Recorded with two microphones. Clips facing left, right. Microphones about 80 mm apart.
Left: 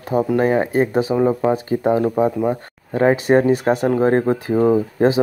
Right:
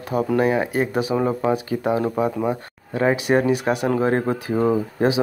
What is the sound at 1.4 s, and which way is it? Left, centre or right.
Speech, left.